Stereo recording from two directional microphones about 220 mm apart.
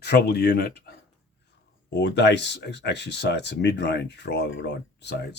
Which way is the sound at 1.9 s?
50° left (ahead or behind).